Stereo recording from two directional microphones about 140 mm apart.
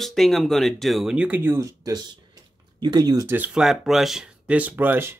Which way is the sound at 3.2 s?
10° right (ahead or behind).